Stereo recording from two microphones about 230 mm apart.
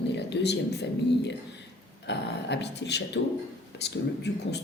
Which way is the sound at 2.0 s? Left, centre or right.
Left.